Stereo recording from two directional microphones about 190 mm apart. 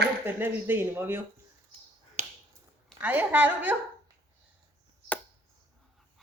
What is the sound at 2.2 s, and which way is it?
Finger snapping, 40° right (ahead or behind).